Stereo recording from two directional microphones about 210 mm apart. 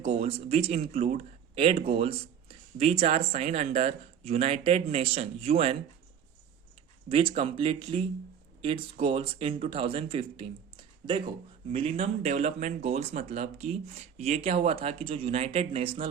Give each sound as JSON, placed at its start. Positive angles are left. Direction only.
{"t": 0.0, "sound": "speech", "side_deg": -30}
{"t": 7.1, "sound": "speech", "side_deg": -25}